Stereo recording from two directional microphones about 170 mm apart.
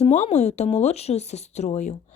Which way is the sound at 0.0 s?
40° left (ahead or behind).